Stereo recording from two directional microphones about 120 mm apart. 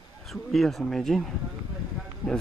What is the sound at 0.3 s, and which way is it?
Speech, centre (ahead or behind).